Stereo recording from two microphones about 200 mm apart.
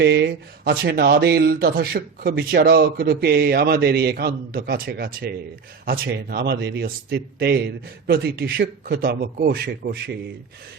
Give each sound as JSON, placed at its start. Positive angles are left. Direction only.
{"t": 0.0, "sound": "speech", "side_deg": -55}